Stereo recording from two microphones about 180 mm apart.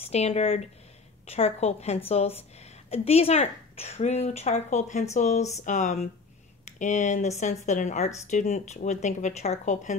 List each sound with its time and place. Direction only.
0.1 s a woman's voice: 35° left (ahead or behind)